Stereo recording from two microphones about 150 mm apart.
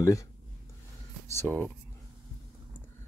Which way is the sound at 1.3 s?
10° left (ahead or behind).